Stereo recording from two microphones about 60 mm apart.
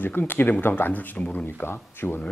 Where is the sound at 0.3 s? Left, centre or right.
Left.